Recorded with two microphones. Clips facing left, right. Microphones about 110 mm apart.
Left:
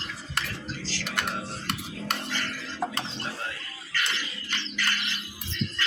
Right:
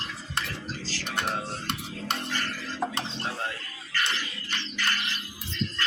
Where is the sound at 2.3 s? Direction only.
45° right (ahead or behind).